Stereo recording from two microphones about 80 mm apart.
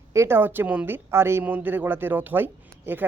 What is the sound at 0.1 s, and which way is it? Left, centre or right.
Speech, right.